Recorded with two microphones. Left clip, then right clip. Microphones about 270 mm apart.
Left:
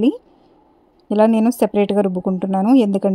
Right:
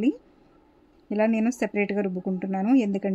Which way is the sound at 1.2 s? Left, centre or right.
Left.